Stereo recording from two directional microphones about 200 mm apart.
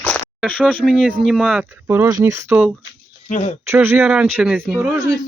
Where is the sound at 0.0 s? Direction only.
5° left (ahead or behind).